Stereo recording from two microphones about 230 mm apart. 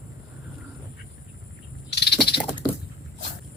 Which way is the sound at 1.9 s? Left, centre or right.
Left.